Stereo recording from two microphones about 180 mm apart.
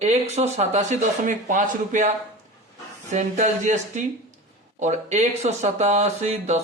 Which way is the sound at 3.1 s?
40° right (ahead or behind).